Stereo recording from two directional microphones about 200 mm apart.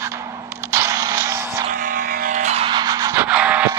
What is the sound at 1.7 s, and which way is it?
Music, 45° right (ahead or behind).